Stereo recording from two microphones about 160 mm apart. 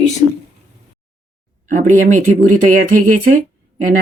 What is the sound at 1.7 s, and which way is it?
Speech, 50° right (ahead or behind).